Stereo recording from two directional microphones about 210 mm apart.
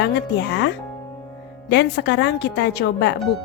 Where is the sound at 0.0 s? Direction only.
55° left (ahead or behind).